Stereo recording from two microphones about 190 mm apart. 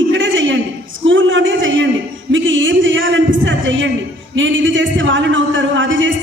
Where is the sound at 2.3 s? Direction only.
80° right.